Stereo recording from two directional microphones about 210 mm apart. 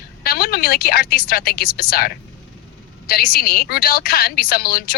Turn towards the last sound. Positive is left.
turn(degrees=45)  # may be behind; listen again after turning